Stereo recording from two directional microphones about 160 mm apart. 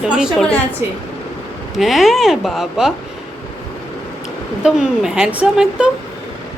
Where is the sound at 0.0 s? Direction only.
5° right (ahead or behind).